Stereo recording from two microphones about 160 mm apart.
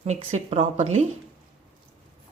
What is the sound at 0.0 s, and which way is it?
Speech, 40° right (ahead or behind).